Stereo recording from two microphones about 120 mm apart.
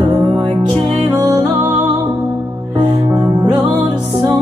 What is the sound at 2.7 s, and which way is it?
Music, 40° right (ahead or behind).